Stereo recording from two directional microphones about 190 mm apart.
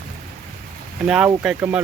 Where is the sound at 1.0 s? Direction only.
5° right (ahead or behind).